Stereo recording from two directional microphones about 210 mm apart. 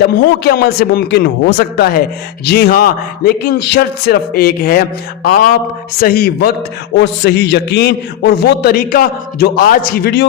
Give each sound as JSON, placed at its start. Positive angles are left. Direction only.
{"t": 0.1, "sound": "a man's voice", "side_deg": 50}